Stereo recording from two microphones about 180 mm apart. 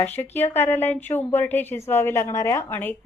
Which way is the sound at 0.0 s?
10° left (ahead or behind).